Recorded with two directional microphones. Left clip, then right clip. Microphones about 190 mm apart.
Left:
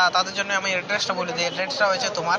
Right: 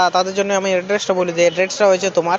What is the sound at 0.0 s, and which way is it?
Speech, 45° right (ahead or behind).